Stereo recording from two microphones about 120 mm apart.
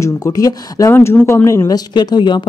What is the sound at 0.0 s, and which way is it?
Speech, 30° left (ahead or behind).